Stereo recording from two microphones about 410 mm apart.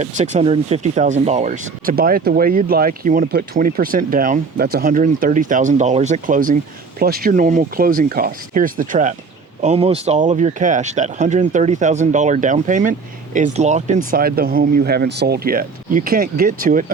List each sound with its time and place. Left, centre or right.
0.0 s speech: centre